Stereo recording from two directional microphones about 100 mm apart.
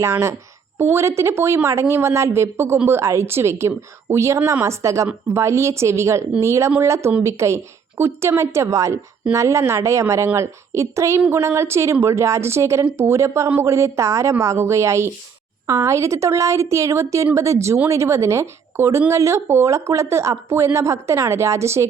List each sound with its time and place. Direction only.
0.1 s a woman's voice: 30° right (ahead or behind)